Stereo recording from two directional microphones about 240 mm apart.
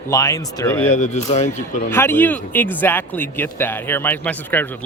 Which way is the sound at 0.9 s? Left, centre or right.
Left.